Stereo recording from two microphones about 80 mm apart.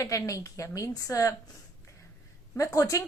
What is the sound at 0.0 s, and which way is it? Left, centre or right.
A woman's voice, left.